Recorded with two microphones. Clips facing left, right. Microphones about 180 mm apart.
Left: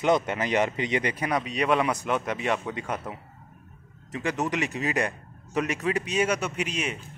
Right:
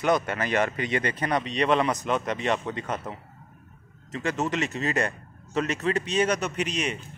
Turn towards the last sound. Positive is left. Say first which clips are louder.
# right 2 dB
turn(degrees=5)  # may be behind; listen again after turning